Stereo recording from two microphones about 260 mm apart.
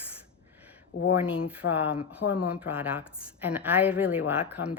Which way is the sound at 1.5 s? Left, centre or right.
Centre.